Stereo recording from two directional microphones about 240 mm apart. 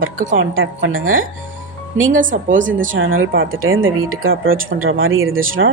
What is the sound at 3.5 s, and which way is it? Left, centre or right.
Speech, right.